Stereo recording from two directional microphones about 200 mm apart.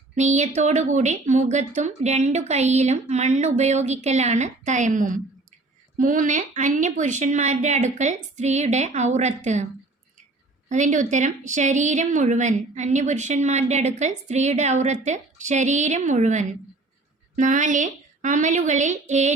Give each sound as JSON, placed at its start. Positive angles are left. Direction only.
{"t": 0.2, "sound": "a woman's voice", "side_deg": -35}
{"t": 10.7, "sound": "a woman's voice", "side_deg": -40}